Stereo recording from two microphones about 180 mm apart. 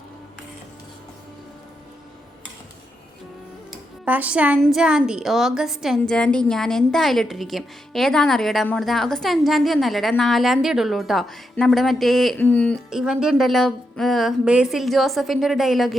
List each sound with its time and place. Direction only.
4.0 s a woman's voice: 10° right (ahead or behind)